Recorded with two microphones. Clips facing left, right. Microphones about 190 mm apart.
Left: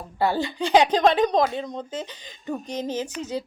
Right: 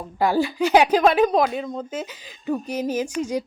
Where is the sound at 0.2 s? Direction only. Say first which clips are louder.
Right 4 dB; 10° right (ahead or behind).